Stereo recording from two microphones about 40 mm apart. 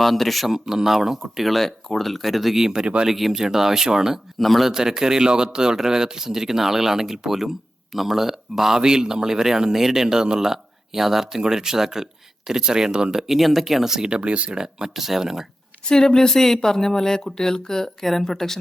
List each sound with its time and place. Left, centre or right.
0.0 s speech: centre
2.8 s speech: right
3.1 s a man's voice: centre
4.4 s speech: centre
4.6 s a man's voice: centre
13.2 s speech: centre
14.2 s speech: right
14.5 s a man's voice: centre
15.9 s speech: centre